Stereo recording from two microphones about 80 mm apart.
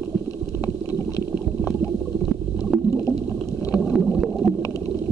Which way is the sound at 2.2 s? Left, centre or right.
Centre.